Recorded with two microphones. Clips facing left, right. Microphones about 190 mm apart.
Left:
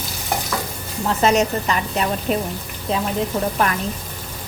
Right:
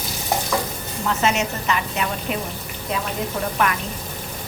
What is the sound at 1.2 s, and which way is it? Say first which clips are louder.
Speech: left 6 dB; 35° left (ahead or behind).